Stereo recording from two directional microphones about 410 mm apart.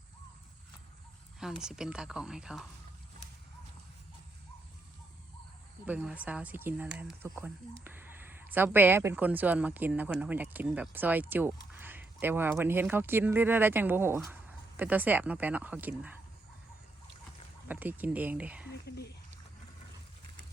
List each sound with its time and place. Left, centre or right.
1.6 s speech: centre
5.8 s speech: centre
17.7 s speech: centre
18.9 s speech: left